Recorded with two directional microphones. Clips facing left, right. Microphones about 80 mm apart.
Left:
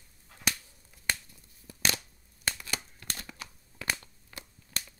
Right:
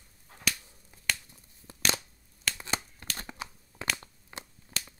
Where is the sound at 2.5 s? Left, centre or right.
Right.